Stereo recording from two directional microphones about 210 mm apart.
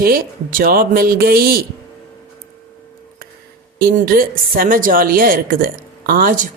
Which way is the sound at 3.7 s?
45° right (ahead or behind).